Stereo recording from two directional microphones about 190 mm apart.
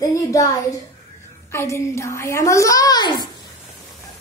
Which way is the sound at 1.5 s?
15° left (ahead or behind).